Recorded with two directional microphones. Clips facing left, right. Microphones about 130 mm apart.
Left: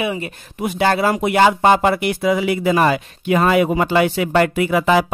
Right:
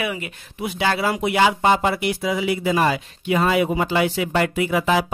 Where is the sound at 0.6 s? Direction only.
45° left (ahead or behind).